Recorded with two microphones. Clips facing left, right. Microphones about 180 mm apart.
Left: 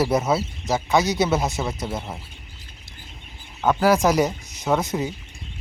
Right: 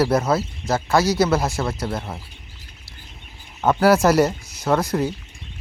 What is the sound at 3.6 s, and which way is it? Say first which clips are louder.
Speech: right 2 dB; 5° right (ahead or behind).